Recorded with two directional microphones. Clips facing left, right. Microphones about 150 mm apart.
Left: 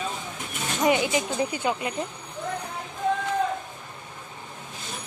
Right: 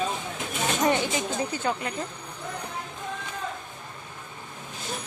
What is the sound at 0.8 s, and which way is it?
Speech, 15° left (ahead or behind).